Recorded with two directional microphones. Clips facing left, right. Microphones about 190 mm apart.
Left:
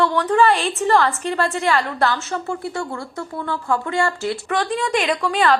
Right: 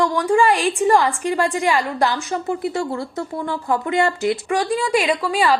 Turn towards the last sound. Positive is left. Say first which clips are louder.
# even
turn(degrees=-10)  # may be behind; listen again after turning